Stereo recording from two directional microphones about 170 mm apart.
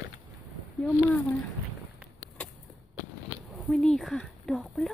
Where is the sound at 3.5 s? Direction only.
Centre (ahead or behind).